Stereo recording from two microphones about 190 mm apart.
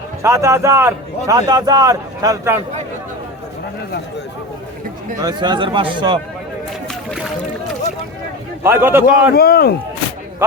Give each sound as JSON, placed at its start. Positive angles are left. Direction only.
{"t": 0.2, "sound": "speech", "side_deg": -15}
{"t": 5.2, "sound": "speech", "side_deg": -20}
{"t": 8.6, "sound": "speech", "side_deg": -10}
{"t": 9.3, "sound": "speech", "side_deg": 55}